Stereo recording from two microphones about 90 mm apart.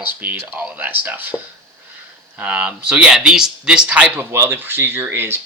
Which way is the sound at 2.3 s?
15° right (ahead or behind).